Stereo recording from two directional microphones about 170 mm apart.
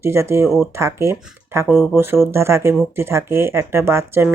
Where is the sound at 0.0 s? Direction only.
15° right (ahead or behind).